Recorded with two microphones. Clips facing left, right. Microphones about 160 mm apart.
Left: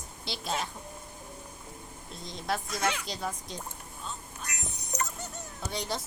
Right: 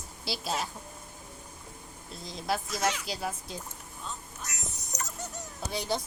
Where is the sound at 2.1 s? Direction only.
Centre (ahead or behind).